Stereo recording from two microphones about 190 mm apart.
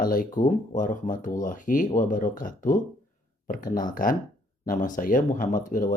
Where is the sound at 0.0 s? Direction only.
45° left (ahead or behind).